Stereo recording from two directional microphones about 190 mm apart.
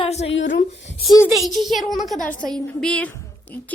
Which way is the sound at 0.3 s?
75° left (ahead or behind).